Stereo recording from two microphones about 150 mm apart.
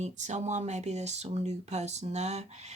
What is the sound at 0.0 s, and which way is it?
Speech, 50° right (ahead or behind).